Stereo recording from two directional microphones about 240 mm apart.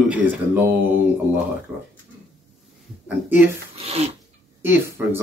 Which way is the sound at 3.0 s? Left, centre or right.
Centre.